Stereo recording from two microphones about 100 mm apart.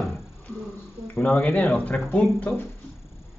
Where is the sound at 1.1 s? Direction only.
20° left (ahead or behind).